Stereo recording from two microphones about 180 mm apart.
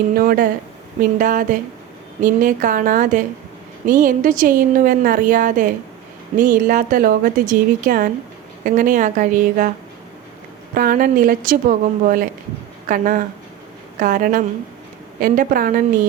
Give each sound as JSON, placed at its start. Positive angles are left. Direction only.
{"t": 0.1, "sound": "a woman's voice", "side_deg": -55}
{"t": 10.8, "sound": "a woman's voice", "side_deg": -50}